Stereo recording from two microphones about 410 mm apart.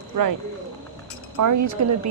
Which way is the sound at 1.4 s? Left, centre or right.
Right.